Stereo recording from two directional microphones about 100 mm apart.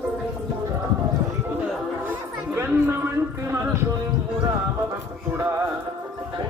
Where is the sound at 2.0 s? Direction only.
20° right (ahead or behind).